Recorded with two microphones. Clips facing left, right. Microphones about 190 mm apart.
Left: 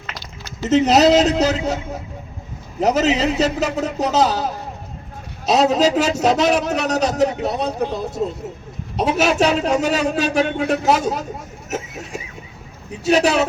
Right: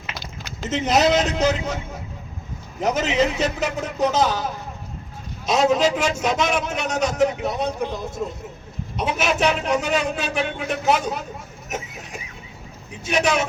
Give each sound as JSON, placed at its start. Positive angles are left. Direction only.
{"t": 0.7, "sound": "a man's voice", "side_deg": 40}
{"t": 2.8, "sound": "a man's voice", "side_deg": 40}
{"t": 9.0, "sound": "a man's voice", "side_deg": 40}
{"t": 13.1, "sound": "a man's voice", "side_deg": 35}